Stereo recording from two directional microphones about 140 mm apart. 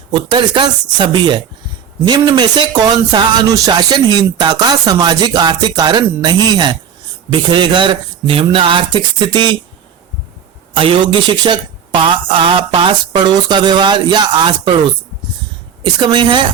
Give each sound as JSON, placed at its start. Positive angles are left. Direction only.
{"t": 0.1, "sound": "speech", "side_deg": -35}
{"t": 10.8, "sound": "speech", "side_deg": -40}